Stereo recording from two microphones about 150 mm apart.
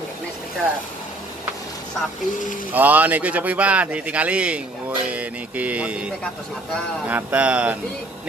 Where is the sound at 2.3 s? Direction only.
60° left (ahead or behind).